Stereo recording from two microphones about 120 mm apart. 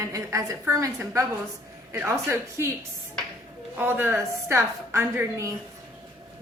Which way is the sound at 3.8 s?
15° right (ahead or behind).